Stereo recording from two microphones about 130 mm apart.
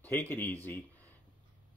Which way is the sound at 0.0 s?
15° left (ahead or behind).